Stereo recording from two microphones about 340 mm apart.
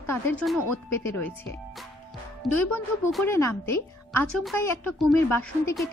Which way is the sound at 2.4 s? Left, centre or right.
Centre.